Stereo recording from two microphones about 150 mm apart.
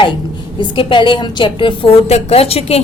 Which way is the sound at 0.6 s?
35° left (ahead or behind).